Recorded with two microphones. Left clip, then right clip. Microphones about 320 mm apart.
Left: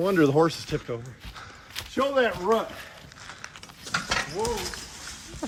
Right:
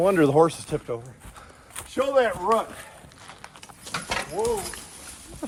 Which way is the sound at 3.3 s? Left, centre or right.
Right.